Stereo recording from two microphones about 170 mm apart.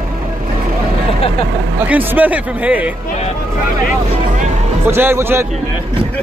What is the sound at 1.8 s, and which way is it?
Speech, 10° right (ahead or behind).